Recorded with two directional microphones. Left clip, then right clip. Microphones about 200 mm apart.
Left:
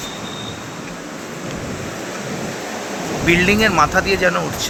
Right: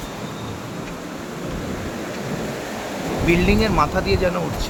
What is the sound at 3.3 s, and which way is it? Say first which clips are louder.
Speech: left 5 dB; 5° right (ahead or behind).